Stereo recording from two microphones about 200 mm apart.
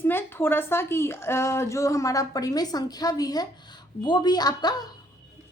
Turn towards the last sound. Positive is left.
turn(degrees=20)  # may be behind; listen again after turning